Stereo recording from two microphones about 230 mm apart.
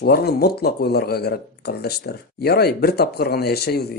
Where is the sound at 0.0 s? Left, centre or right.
Left.